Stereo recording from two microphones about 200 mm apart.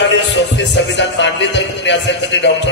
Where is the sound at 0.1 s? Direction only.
60° left (ahead or behind).